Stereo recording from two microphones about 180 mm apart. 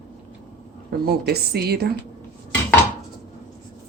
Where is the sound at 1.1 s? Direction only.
60° right (ahead or behind).